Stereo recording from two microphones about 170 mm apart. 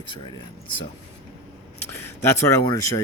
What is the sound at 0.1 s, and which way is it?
Speech, 30° left (ahead or behind).